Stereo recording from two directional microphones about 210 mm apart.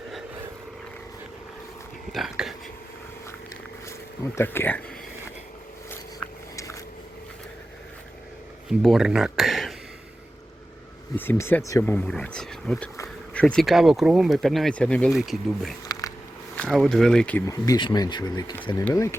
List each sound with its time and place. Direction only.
2.1 s speech: centre (ahead or behind)
4.4 s speech: 10° left (ahead or behind)
8.8 s speech: centre (ahead or behind)
11.2 s speech: 10° left (ahead or behind)
15.9 s cat: 15° left (ahead or behind)
16.6 s speech: centre (ahead or behind)